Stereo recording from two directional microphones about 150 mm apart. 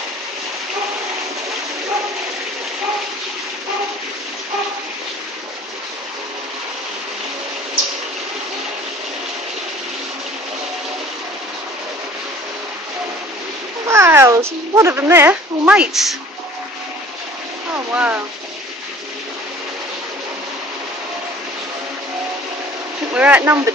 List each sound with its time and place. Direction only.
13.8 s speech: 20° right (ahead or behind); by 16.1 s centre (ahead or behind)
17.7 s speech: 10° right (ahead or behind)
23.1 s speech: 10° right (ahead or behind)